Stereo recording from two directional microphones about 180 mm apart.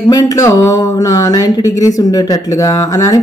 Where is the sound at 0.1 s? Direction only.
20° left (ahead or behind).